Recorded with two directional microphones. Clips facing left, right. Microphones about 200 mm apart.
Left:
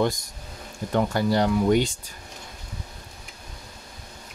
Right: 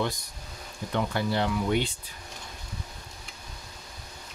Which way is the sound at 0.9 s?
40° left (ahead or behind).